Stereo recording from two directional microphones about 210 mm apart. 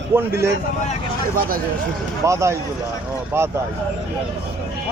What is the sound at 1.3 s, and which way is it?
Speech, 45° right (ahead or behind).